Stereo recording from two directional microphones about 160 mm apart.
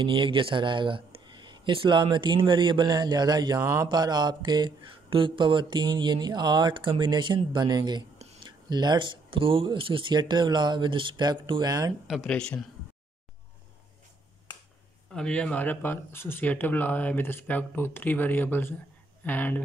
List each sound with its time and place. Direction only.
0.0 s speech: 30° right (ahead or behind)
12.1 s speech: centre (ahead or behind)
15.1 s speech: 5° left (ahead or behind)